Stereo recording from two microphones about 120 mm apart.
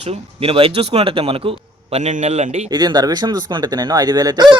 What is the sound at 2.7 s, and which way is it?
Speech, 35° right (ahead or behind).